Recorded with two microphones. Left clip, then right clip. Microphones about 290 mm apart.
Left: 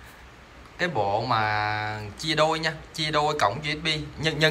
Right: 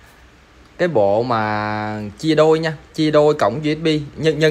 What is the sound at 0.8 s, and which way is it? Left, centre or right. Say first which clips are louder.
Speech: right 10 dB; centre.